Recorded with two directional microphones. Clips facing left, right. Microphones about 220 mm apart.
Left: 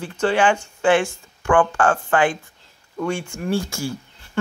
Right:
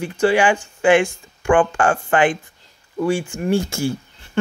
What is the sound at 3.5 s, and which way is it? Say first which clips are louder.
Speech: right 4 dB; 25° right (ahead or behind).